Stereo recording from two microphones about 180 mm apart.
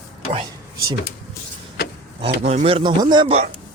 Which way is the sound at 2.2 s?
35° right (ahead or behind).